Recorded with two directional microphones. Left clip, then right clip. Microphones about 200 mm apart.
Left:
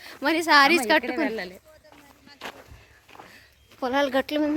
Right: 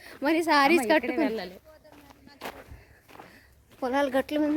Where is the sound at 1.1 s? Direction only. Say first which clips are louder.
Left 1 dB; 35° left (ahead or behind).